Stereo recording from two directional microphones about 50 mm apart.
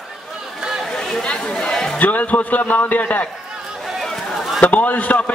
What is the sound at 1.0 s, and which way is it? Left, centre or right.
A man's voice, centre.